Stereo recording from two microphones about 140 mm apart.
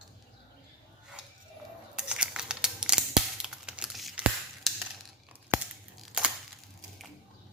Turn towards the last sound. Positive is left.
turn(degrees=-5)  # may be behind; listen again after turning